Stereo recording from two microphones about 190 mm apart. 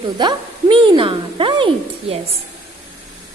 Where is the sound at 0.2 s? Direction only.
25° right (ahead or behind).